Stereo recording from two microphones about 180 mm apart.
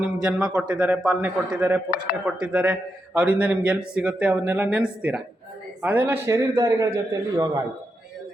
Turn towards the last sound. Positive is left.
turn(degrees=-20)  # may be behind; listen again after turning